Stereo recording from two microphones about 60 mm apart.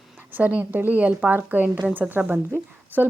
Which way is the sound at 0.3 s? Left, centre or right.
Right.